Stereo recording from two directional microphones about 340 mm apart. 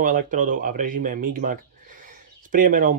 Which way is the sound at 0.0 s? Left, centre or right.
Right.